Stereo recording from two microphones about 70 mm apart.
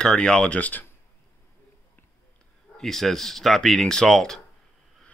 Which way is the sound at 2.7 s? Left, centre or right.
Centre.